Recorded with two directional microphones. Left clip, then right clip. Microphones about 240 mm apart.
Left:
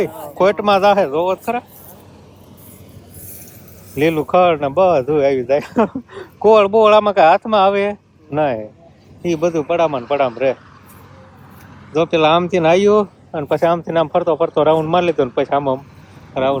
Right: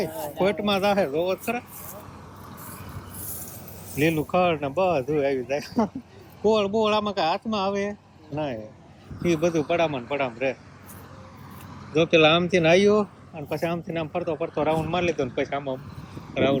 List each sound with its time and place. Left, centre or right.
0.1 s speech: centre
0.3 s speech: left
1.3 s speech: centre
3.9 s speech: left
9.2 s speech: centre
11.9 s speech: centre
13.0 s speech: left
14.5 s speech: left
15.0 s speech: centre